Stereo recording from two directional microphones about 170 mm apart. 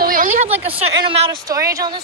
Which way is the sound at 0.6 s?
35° right (ahead or behind).